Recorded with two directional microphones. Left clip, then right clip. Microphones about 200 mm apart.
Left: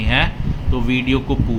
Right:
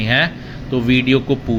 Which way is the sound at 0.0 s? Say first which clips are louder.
Right 2 dB; 20° right (ahead or behind).